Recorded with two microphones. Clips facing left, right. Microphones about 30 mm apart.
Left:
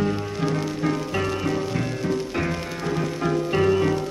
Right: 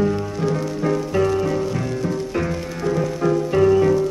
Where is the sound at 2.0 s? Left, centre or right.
Centre.